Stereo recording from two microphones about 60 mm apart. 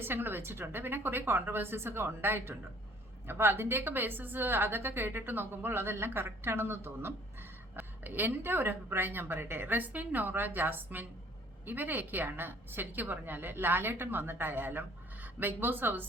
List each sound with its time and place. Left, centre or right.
0.0 s a woman's voice: right